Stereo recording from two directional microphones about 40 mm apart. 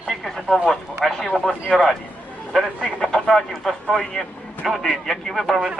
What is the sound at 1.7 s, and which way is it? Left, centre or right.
Speech, left.